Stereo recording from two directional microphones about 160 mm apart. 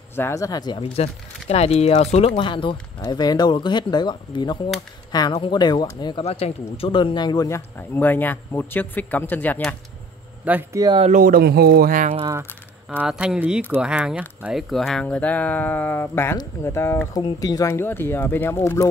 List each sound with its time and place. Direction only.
0.1 s speech: 15° left (ahead or behind)
1.0 s speech: 40° left (ahead or behind)
6.2 s speech: 40° left (ahead or behind); by 9.8 s 10° left (ahead or behind)
10.4 s speech: 10° right (ahead or behind)
10.8 s speech: 30° right (ahead or behind)
11.1 s speech: 60° right (ahead or behind)
12.9 s speech: 5° right (ahead or behind); by 18.9 s 15° left (ahead or behind)